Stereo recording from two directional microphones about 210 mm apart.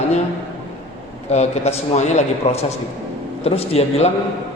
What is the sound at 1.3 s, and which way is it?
A man's voice, 30° left (ahead or behind).